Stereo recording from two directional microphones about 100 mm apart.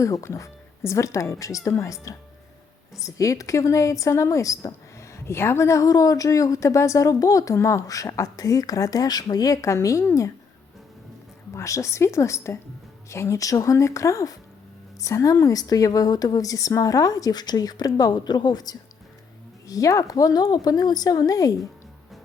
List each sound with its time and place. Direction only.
0.0 s a woman's voice: 30° left (ahead or behind)
11.5 s a woman's voice: 30° left (ahead or behind)